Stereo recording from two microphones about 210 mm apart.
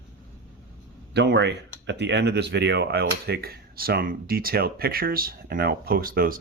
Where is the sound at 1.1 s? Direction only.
55° right (ahead or behind).